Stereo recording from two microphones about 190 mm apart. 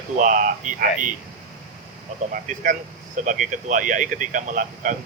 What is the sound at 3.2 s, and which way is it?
Speech, 45° right (ahead or behind).